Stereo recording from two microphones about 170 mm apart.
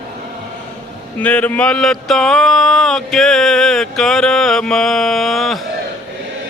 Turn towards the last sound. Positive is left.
turn(degrees=0)  # may be behind; listen again after turning